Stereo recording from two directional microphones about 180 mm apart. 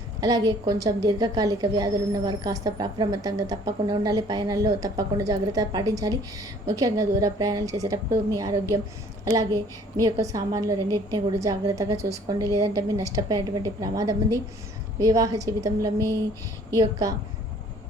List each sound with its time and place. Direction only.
0.2 s a woman's voice: 20° right (ahead or behind)